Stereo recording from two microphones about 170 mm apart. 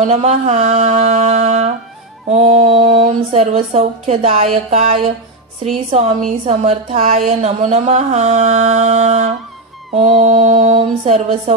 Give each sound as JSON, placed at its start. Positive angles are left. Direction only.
{"t": 0.0, "sound": "a woman's voice", "side_deg": -35}